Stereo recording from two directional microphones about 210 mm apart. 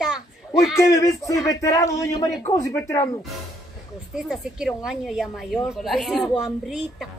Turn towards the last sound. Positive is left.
turn(degrees=0)  # may be behind; listen again after turning